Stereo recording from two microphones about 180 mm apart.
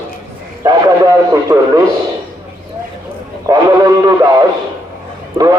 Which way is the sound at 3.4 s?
20° right (ahead or behind).